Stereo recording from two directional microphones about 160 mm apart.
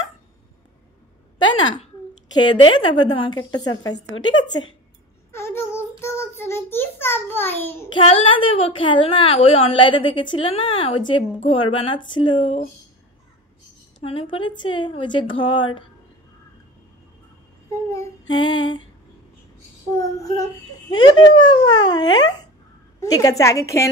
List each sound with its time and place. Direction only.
2.4 s a woman's voice: 30° left (ahead or behind)
5.3 s child singing: 15° left (ahead or behind)
7.9 s a woman's voice: 35° left (ahead or behind)
14.0 s a woman's voice: 35° left (ahead or behind)
17.9 s child singing: 25° left (ahead or behind)
20.0 s a woman's voice: 20° left (ahead or behind)